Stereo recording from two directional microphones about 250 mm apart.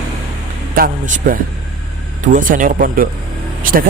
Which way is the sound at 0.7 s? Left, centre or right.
Right.